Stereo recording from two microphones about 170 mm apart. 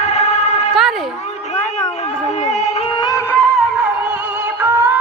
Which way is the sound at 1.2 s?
40° left (ahead or behind).